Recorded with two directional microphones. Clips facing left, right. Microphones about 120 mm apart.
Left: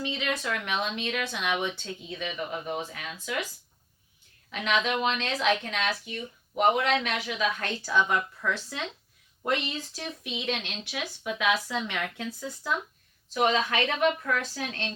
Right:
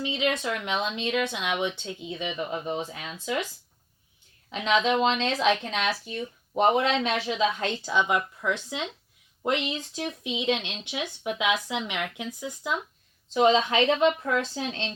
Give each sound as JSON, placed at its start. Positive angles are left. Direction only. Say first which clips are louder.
{"t": 0.0, "sound": "speech", "louder": "right 4 dB", "side_deg": -20}
{"t": 4.4, "sound": "speech", "louder": "right 4 dB", "side_deg": -25}
{"t": 6.1, "sound": "speech", "louder": "right 4 dB", "side_deg": -40}
{"t": 6.7, "sound": "speech", "louder": "right 1 dB", "side_deg": -25}